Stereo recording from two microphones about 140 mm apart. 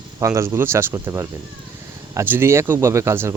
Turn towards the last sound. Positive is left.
turn(degrees=-20)  # may be behind; listen again after turning